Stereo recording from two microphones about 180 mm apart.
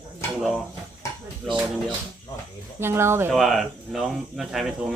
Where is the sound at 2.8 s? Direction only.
15° right (ahead or behind).